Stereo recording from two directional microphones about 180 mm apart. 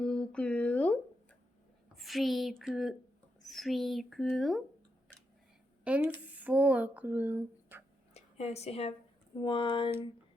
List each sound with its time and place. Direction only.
0.0 s a sound: 5° left (ahead or behind)
2.0 s speech: centre (ahead or behind)
5.8 s speech: 5° right (ahead or behind)
8.1 s a woman's voice: 35° left (ahead or behind)